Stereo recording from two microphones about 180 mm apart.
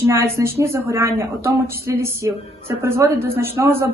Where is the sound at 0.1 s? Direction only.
15° right (ahead or behind).